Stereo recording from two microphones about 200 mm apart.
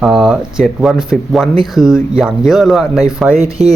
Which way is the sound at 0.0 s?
Centre (ahead or behind).